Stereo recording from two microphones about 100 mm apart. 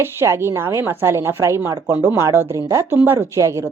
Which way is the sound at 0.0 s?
25° right (ahead or behind).